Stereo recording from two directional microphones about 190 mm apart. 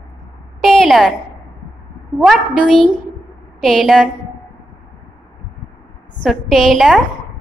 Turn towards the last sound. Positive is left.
turn(degrees=0)  # may be behind; listen again after turning